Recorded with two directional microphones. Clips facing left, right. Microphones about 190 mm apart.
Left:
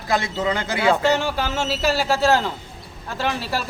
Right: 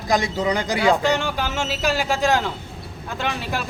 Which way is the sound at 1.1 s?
5° left (ahead or behind).